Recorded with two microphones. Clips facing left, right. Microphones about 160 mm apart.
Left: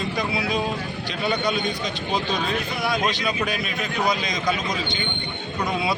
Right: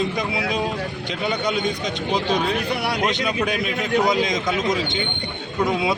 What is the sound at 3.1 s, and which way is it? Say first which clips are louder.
Speech: right 3 dB; 20° right (ahead or behind).